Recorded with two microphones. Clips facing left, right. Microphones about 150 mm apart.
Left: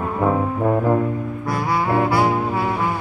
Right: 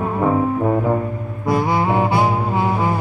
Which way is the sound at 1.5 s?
20° right (ahead or behind).